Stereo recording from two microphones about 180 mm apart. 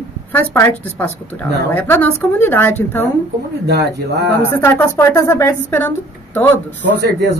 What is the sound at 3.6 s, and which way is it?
Speech, 65° right (ahead or behind).